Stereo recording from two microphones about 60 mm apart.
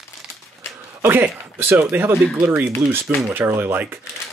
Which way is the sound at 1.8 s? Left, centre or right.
Right.